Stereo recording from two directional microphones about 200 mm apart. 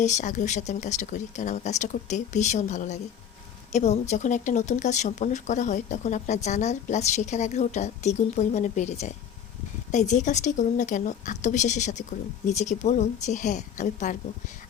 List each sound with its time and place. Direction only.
0.0 s speech: 35° left (ahead or behind)